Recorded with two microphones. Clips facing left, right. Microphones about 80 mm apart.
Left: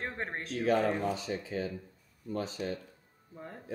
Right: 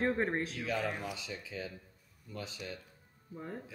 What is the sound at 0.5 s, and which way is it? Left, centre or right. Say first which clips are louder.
Speech: left 8 dB; left.